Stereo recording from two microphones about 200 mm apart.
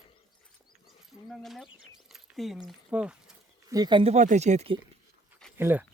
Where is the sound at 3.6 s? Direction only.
20° right (ahead or behind).